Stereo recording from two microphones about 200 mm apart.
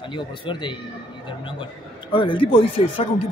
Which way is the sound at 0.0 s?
25° left (ahead or behind).